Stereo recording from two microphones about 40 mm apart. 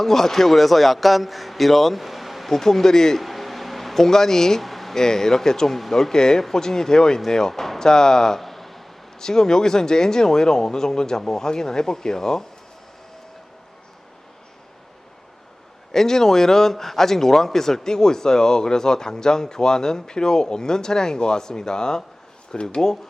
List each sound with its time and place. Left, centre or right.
0.0 s a man's voice: centre
2.5 s a man's voice: centre
3.2 s a sound: centre
5.0 s a man's voice: centre
8.4 s a sound: centre
9.1 s a man's voice: centre
15.9 s a man's voice: centre